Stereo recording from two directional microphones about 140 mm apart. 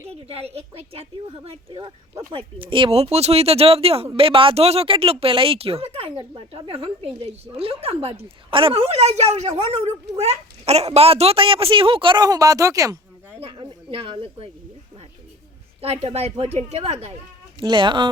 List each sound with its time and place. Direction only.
0.1 s a woman's voice: 45° right (ahead or behind); by 13.0 s 25° right (ahead or behind)
13.4 s a woman's voice: 40° right (ahead or behind)
15.8 s a woman's voice: 45° right (ahead or behind)
17.6 s speech: 35° right (ahead or behind)